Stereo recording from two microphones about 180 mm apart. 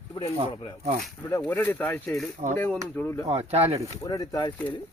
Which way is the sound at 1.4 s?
10° left (ahead or behind).